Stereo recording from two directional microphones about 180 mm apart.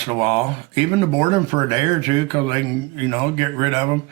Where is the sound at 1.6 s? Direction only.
25° right (ahead or behind).